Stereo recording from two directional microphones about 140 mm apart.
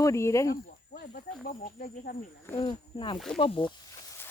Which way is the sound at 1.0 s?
90° left.